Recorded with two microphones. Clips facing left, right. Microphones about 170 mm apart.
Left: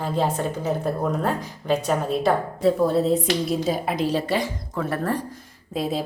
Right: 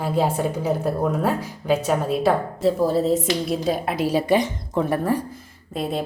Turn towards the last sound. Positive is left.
turn(degrees=0)  # may be behind; listen again after turning